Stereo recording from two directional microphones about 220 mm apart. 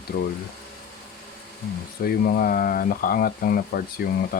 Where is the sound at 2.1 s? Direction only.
45° left (ahead or behind).